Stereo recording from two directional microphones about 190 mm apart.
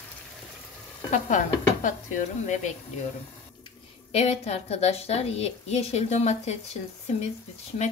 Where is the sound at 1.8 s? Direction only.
45° left (ahead or behind).